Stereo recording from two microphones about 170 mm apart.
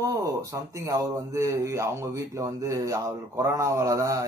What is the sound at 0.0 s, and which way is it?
Speech, 20° right (ahead or behind).